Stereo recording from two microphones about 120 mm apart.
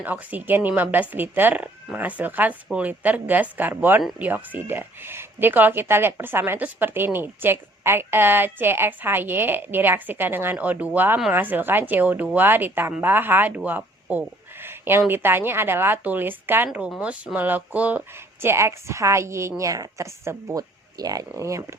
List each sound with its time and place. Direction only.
0.0 s speech: 15° right (ahead or behind)
18.4 s a woman's voice: 25° right (ahead or behind)